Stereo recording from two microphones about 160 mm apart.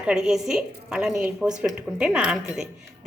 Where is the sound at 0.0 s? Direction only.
5° right (ahead or behind).